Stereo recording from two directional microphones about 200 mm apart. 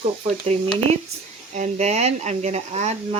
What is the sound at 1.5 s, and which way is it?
Speech, 35° right (ahead or behind).